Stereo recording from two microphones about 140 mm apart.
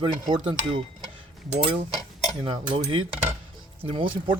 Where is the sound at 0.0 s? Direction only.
35° right (ahead or behind).